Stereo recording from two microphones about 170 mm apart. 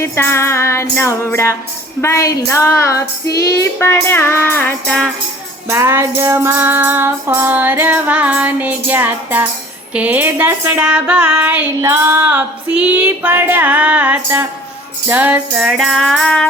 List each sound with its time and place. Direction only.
0.0 s music: 15° left (ahead or behind)
5.6 s music: 15° right (ahead or behind); by 16.5 s 5° left (ahead or behind)